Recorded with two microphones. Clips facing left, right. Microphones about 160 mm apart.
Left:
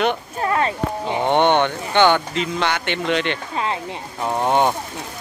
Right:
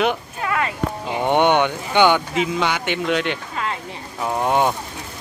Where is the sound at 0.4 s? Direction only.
30° left (ahead or behind).